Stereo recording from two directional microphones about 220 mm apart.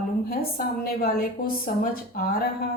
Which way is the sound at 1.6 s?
40° left (ahead or behind).